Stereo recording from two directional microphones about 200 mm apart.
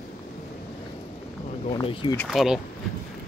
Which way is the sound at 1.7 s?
25° left (ahead or behind).